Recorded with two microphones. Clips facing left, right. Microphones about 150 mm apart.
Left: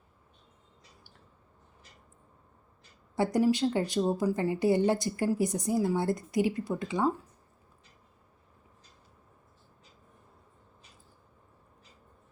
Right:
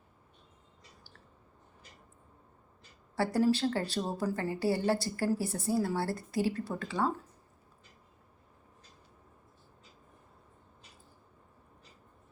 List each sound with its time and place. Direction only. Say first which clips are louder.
3.2 s speech: left 2 dB; 15° left (ahead or behind)